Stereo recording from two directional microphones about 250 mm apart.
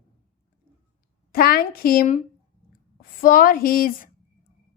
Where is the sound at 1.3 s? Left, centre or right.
Left.